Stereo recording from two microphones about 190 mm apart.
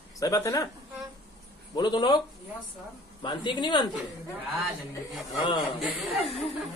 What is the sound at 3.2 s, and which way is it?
A man's voice, 25° left (ahead or behind).